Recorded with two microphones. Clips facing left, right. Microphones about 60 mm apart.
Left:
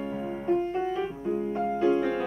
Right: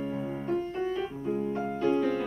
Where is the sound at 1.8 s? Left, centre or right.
Centre.